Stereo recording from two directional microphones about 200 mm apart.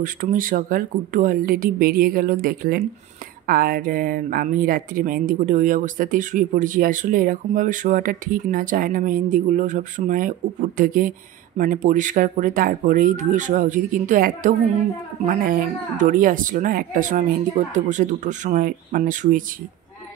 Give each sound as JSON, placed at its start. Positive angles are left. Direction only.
{"t": 0.0, "sound": "speech", "side_deg": -40}